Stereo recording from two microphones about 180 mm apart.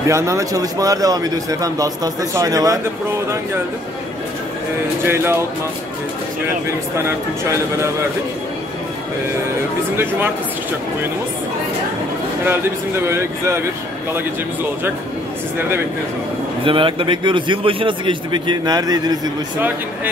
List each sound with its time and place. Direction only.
0.1 s a man's voice: 15° right (ahead or behind)
5.0 s speech: 15° right (ahead or behind)
7.1 s speech: 15° right (ahead or behind)
9.9 s speech: 10° right (ahead or behind)
12.4 s speech: 15° right (ahead or behind)
16.6 s a man's voice: 30° right (ahead or behind)